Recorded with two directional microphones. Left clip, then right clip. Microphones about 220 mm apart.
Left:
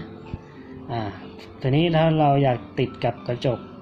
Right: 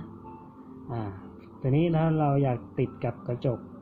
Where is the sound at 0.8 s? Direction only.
10° right (ahead or behind).